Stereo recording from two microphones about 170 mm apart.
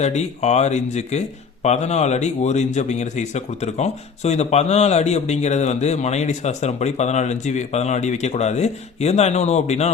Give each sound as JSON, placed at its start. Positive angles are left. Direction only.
{"t": 0.0, "sound": "a man's voice", "side_deg": 40}